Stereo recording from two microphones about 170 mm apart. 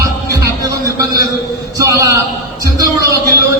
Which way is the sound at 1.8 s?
20° right (ahead or behind).